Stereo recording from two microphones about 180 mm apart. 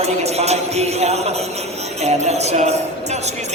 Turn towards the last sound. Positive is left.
turn(degrees=-40)  # may be behind; listen again after turning